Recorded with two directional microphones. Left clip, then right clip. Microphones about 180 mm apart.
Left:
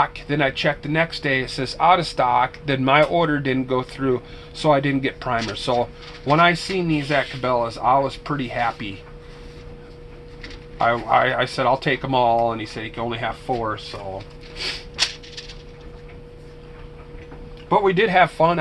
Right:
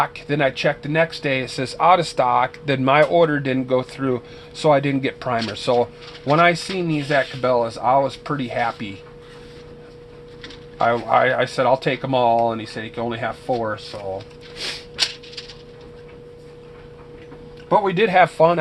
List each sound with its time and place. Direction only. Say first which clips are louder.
0.0 s speech: even; 35° right (ahead or behind)
10.8 s speech: right 1 dB; 30° right (ahead or behind)
17.7 s speech: even; 35° right (ahead or behind)